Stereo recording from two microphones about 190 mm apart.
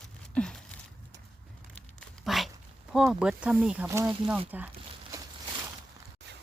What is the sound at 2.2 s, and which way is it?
Dog, centre (ahead or behind).